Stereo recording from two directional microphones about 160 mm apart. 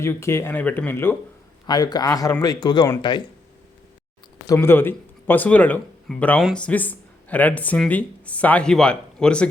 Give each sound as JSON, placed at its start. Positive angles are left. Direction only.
{"t": 0.0, "sound": "speech", "side_deg": 15}
{"t": 1.6, "sound": "speech", "side_deg": 25}
{"t": 4.5, "sound": "speech", "side_deg": 15}